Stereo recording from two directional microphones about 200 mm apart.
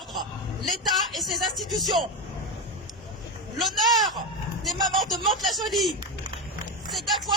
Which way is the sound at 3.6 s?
Centre (ahead or behind).